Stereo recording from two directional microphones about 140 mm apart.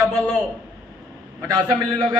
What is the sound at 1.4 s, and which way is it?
Speech, 25° right (ahead or behind).